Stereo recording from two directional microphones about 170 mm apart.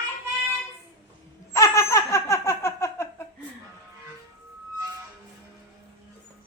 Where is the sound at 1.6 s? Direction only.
15° left (ahead or behind).